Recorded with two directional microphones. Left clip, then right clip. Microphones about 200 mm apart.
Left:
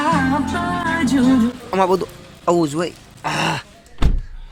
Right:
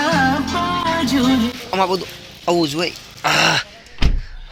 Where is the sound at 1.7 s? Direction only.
30° left (ahead or behind).